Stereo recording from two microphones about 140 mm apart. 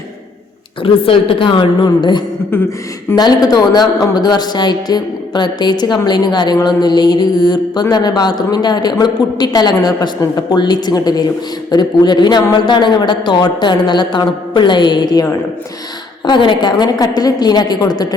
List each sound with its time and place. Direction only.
0.8 s a man's voice: 40° left (ahead or behind)
2.5 s a sound: 15° left (ahead or behind)
3.2 s a man's voice: 30° left (ahead or behind)